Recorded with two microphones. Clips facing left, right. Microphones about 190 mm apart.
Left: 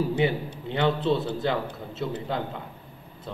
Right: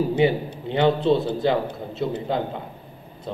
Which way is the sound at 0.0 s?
20° right (ahead or behind).